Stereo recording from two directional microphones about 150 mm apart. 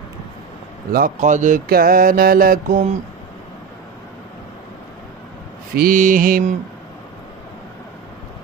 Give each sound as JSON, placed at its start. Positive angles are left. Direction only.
{"t": 0.9, "sound": "mantra", "side_deg": -65}
{"t": 5.8, "sound": "mantra", "side_deg": -65}